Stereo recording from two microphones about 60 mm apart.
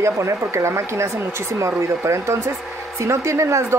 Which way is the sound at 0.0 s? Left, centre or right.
Right.